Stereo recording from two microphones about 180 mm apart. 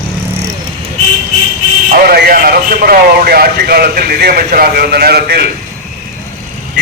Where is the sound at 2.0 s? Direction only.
55° right (ahead or behind).